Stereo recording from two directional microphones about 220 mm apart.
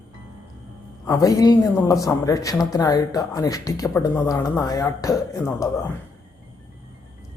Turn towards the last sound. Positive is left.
turn(degrees=15)  # may be behind; listen again after turning